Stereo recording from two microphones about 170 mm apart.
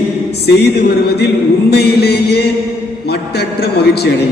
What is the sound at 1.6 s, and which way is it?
A man's voice, 70° left (ahead or behind).